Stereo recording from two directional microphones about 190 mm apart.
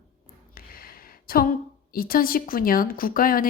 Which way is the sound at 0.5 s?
50° left (ahead or behind).